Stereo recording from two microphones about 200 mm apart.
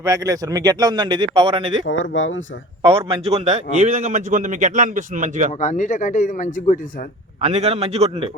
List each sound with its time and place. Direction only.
0.0 s a man's voice: 15° right (ahead or behind)
1.8 s speech: 75° left (ahead or behind)
2.8 s a man's voice: 30° right (ahead or behind)
5.5 s a man's voice: 40° left (ahead or behind)
7.4 s a man's voice: 30° right (ahead or behind)